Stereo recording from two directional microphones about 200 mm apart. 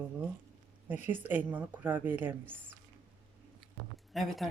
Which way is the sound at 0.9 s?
10° right (ahead or behind).